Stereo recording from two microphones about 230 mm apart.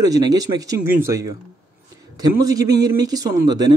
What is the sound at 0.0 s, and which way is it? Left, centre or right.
A man's voice, centre.